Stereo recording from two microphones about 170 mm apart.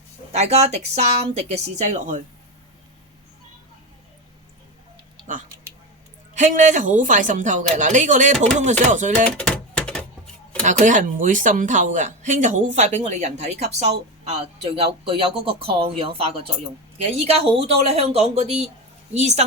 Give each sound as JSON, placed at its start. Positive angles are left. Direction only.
{"t": 0.3, "sound": "speech", "side_deg": -40}
{"t": 6.3, "sound": "speech", "side_deg": -45}
{"t": 9.2, "sound": "a sound", "side_deg": 5}
{"t": 10.6, "sound": "speech", "side_deg": -45}